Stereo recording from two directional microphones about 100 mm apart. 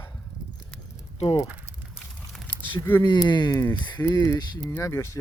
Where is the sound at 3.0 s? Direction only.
50° left (ahead or behind).